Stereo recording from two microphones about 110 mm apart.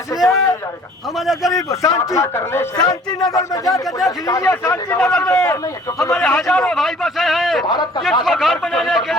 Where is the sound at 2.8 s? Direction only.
40° left (ahead or behind).